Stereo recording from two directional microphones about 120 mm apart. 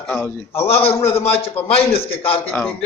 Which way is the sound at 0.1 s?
15° left (ahead or behind).